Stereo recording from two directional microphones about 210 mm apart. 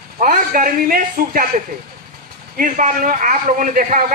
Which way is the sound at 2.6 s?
40° right (ahead or behind).